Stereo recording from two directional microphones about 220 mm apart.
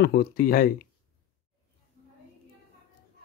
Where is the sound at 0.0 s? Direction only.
45° left (ahead or behind).